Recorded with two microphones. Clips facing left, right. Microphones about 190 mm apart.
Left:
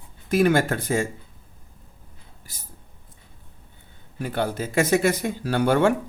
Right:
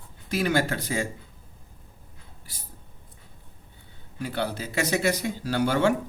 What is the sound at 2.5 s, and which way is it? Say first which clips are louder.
Speech: right 1 dB; 45° left (ahead or behind).